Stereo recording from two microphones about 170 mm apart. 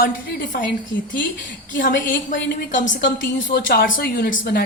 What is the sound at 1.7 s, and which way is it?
A woman's voice, 50° left (ahead or behind).